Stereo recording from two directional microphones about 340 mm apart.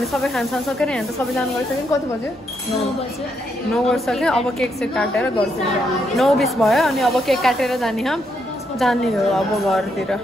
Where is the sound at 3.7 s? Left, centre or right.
Centre.